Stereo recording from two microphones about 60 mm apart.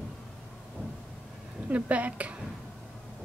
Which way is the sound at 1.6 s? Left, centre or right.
Right.